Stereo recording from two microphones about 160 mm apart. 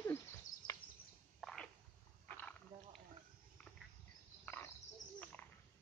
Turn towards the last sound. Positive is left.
turn(degrees=10)  # may be behind; listen again after turning